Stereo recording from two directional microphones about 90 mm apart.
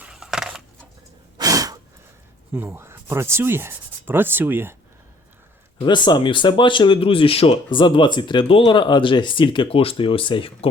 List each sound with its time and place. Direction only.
0.1 s a sound: 5° right (ahead or behind)
1.4 s breathing: 40° right (ahead or behind)
2.5 s speech: 25° right (ahead or behind)
5.8 s speech: 60° left (ahead or behind); by 10.7 s 80° left